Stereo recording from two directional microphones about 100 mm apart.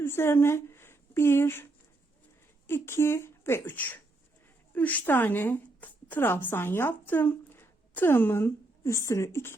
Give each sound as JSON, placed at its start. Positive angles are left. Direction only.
{"t": 0.0, "sound": "a woman's voice", "side_deg": 25}
{"t": 2.6, "sound": "a woman's voice", "side_deg": 25}